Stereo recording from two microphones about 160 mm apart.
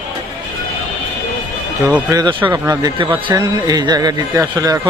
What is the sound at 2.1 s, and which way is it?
Speech, 25° right (ahead or behind).